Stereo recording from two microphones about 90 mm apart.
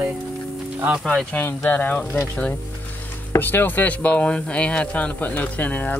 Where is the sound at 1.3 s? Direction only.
25° left (ahead or behind).